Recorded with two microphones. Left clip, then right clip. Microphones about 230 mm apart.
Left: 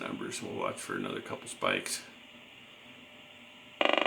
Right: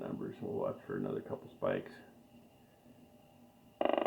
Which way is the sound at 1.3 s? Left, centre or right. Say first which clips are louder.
Left 7 dB; centre.